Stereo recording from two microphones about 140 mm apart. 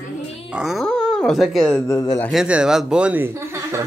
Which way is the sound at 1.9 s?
25° left (ahead or behind).